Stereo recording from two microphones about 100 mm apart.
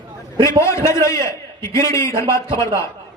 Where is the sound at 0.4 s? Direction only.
30° left (ahead or behind).